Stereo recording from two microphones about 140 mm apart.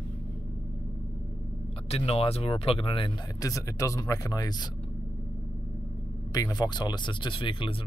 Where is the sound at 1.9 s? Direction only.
45° left (ahead or behind).